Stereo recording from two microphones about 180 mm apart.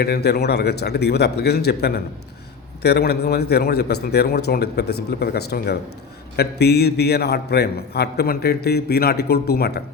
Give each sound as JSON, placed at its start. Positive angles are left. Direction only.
{"t": 0.0, "sound": "a man's voice", "side_deg": 65}